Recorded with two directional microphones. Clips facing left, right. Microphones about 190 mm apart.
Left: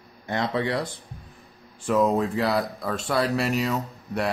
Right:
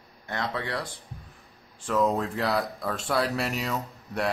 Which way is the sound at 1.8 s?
10° left (ahead or behind).